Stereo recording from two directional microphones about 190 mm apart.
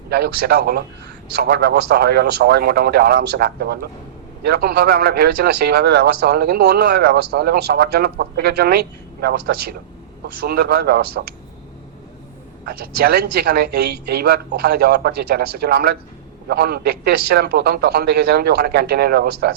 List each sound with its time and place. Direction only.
0.1 s a man's voice: 60° right (ahead or behind)
13.0 s a man's voice: 55° right (ahead or behind)